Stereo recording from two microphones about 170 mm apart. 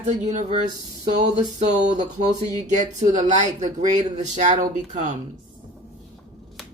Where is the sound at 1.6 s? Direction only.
45° right (ahead or behind).